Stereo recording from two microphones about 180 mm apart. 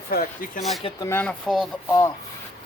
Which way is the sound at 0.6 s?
Centre (ahead or behind).